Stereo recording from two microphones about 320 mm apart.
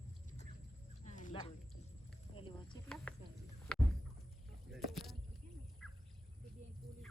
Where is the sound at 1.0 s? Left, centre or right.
Left.